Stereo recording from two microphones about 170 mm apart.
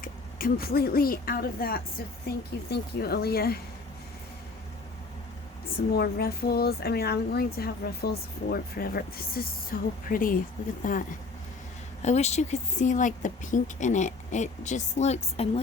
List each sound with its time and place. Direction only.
0.0 s a woman's voice: 60° left (ahead or behind)
2.2 s a woman's voice: 70° left (ahead or behind)
6.0 s speech: 65° left (ahead or behind)
12.0 s speech: 40° left (ahead or behind)